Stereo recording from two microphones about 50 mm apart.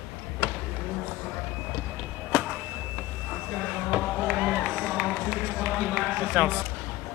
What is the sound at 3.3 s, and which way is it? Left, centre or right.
Vehicle, centre.